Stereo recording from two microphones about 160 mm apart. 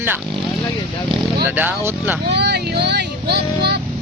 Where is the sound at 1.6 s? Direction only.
10° right (ahead or behind).